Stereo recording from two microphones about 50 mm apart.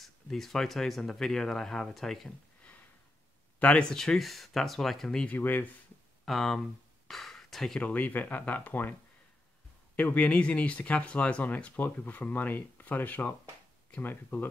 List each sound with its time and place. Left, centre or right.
0.0 s speech: centre
3.5 s speech: left
3.9 s speech: centre
5.3 s speech: left
6.2 s speech: centre
7.1 s a sound: centre
7.8 s speech: left
9.9 s speech: left